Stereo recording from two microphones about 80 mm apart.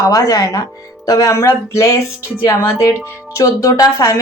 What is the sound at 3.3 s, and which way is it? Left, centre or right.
Speech, left.